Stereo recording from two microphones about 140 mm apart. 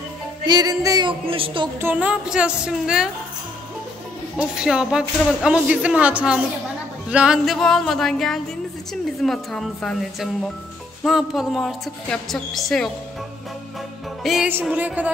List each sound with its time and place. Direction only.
0.5 s music: 30° right (ahead or behind)
1.2 s speech: 40° right (ahead or behind)
1.8 s a woman's voice: 10° right (ahead or behind)
4.4 s speech: 5° right (ahead or behind)
14.2 s a woman's voice: centre (ahead or behind)